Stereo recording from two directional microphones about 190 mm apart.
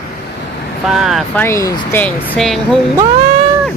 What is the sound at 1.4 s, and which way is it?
Speech, 15° left (ahead or behind).